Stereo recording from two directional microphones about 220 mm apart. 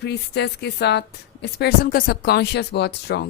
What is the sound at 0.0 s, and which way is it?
A woman's voice, 50° left (ahead or behind).